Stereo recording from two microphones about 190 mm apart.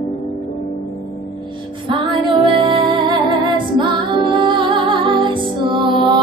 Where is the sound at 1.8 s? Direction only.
25° right (ahead or behind).